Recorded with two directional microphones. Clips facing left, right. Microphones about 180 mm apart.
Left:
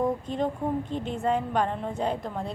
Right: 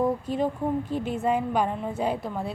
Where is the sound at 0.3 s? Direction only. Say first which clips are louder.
Right 2 dB; 5° right (ahead or behind).